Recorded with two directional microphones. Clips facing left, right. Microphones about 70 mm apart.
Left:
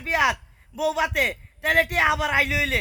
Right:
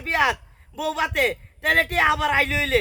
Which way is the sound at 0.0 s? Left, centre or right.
Centre.